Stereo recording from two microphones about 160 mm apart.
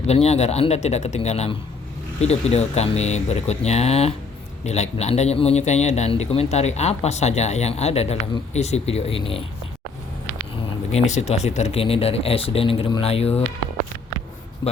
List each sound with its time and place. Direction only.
0.1 s a man's voice: 40° left (ahead or behind)
10.9 s speech: 45° left (ahead or behind)
14.6 s a sound: 25° left (ahead or behind)